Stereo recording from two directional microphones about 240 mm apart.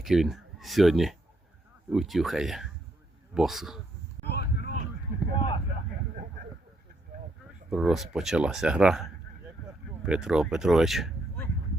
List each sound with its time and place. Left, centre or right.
0.0 s speech: centre
4.2 s a sound: left
7.7 s speech: centre
10.1 s speech: centre